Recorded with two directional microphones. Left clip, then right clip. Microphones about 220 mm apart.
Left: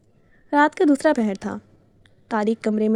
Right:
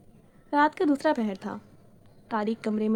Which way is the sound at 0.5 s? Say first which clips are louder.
Left 6 dB; 50° left (ahead or behind).